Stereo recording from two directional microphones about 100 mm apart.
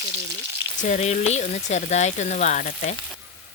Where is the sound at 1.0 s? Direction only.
90° left.